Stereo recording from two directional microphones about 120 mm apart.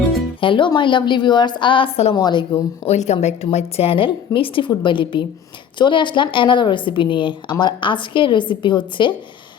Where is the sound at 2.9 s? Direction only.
65° left (ahead or behind).